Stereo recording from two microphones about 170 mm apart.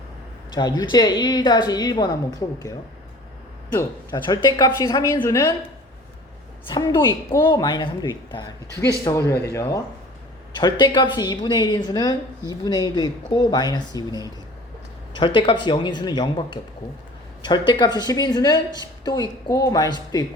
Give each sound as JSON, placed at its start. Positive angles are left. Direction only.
{"t": 0.5, "sound": "speech", "side_deg": 25}
{"t": 3.8, "sound": "speech", "side_deg": 25}
{"t": 6.7, "sound": "speech", "side_deg": 25}